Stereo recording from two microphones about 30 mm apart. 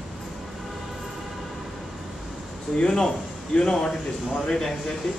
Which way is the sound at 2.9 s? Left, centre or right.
Left.